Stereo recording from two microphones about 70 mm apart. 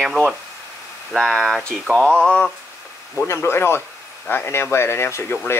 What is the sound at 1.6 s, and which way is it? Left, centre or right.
Speech, centre.